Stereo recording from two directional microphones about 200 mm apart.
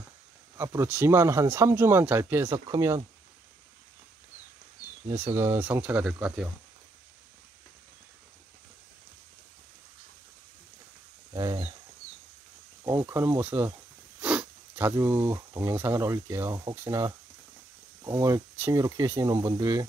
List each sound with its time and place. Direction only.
0.6 s speech: 10° right (ahead or behind)
5.1 s speech: 10° right (ahead or behind)
11.3 s a sound: 20° right (ahead or behind)
12.8 s speech: 15° right (ahead or behind)